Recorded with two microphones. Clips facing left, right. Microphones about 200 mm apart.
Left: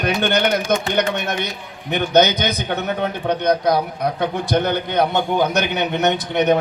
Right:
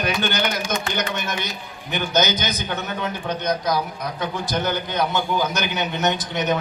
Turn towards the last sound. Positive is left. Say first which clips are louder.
# left 5 dB
turn(degrees=60)  # may be behind; listen again after turning